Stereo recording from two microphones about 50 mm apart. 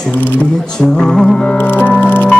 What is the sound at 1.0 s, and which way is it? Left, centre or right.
Speech, centre.